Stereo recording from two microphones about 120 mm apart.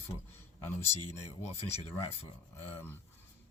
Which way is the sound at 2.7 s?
15° left (ahead or behind).